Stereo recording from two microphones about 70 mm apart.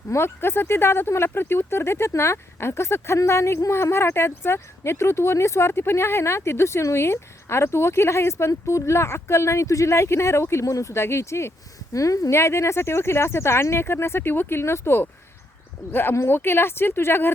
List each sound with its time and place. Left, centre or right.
0.1 s speech: left